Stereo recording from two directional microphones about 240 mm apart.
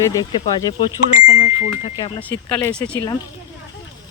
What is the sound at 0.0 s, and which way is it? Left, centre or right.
Speech, centre.